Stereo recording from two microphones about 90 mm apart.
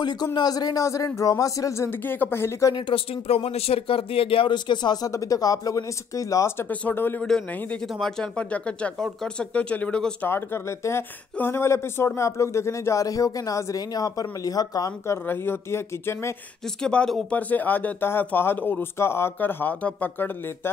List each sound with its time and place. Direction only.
0.0 s speech: 50° left (ahead or behind); by 2.7 s 25° left (ahead or behind)
2.7 s speech: 90° left; by 5.1 s 55° left (ahead or behind)
5.1 s speech: 40° left (ahead or behind)
6.6 s speech: 20° left (ahead or behind)
7.2 s speech: 10° left (ahead or behind)
10.2 s speech: 25° left (ahead or behind); by 14.9 s 45° left (ahead or behind)
15.0 s speech: 25° left (ahead or behind)
16.8 s speech: 10° left (ahead or behind); by 20.7 s 25° left (ahead or behind)